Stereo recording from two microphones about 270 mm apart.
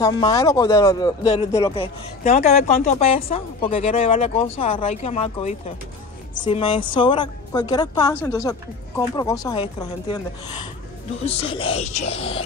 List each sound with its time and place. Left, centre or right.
0.0 s a woman's voice: centre